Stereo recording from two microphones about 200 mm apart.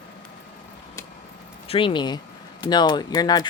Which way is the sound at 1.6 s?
25° left (ahead or behind).